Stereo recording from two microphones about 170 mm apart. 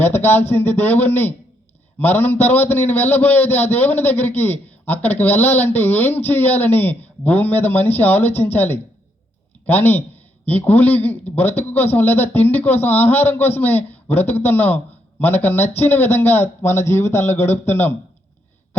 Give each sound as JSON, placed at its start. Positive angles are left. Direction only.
{"t": 0.0, "sound": "a man's voice", "side_deg": 15}